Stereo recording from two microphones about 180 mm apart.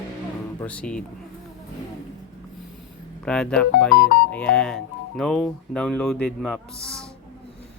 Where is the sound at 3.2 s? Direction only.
5° left (ahead or behind).